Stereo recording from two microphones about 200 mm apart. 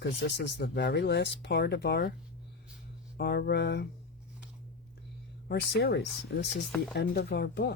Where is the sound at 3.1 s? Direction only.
55° left (ahead or behind).